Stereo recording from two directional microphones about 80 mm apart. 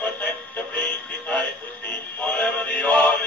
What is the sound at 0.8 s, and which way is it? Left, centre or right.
Music, centre.